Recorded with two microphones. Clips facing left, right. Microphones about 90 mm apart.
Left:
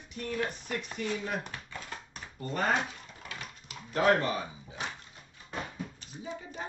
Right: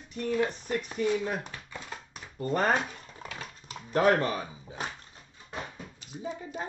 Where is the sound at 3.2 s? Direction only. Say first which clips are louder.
Right 3 dB; 35° right (ahead or behind).